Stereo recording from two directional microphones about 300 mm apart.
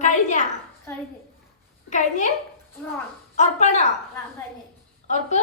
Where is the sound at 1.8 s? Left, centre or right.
Left.